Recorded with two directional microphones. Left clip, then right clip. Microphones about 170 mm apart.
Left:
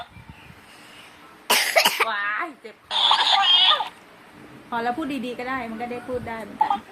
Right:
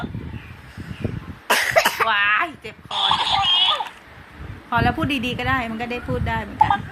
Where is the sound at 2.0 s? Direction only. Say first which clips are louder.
Right 7 dB; 40° right (ahead or behind).